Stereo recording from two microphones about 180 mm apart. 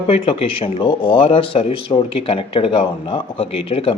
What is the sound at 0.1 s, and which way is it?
Speech, 30° left (ahead or behind).